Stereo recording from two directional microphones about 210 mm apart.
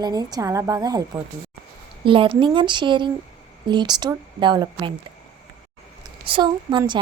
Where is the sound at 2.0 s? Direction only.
25° right (ahead or behind).